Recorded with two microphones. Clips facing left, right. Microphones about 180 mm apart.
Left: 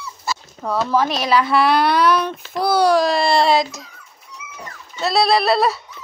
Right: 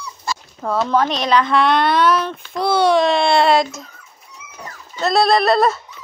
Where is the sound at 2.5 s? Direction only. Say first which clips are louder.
Even; centre (ahead or behind).